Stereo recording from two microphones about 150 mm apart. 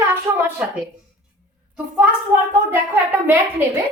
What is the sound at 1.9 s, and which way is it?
Speech, 10° right (ahead or behind).